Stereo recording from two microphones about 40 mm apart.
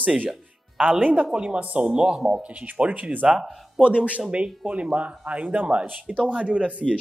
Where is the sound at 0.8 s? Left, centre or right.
Right.